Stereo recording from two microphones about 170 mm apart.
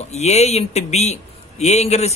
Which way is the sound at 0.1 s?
40° left (ahead or behind).